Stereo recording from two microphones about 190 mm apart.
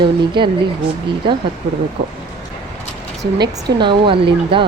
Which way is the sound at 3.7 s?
25° right (ahead or behind).